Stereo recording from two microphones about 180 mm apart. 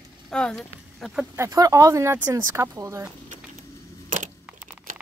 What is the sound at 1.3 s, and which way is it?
Speech, 15° right (ahead or behind).